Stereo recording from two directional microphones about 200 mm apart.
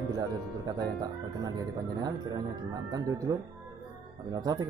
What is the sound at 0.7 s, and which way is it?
Speech, 20° right (ahead or behind).